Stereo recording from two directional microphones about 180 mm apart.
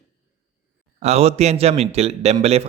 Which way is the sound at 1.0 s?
35° right (ahead or behind).